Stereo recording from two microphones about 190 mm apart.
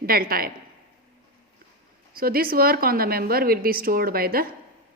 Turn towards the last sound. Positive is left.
turn(degrees=-50)  # may be behind; listen again after turning